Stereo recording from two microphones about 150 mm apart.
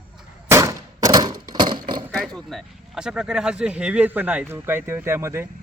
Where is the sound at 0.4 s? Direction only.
20° right (ahead or behind).